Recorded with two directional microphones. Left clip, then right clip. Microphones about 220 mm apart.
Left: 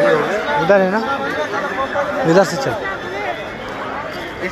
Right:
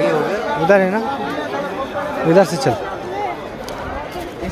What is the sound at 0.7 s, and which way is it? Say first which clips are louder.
Speech: right 1 dB; 15° right (ahead or behind).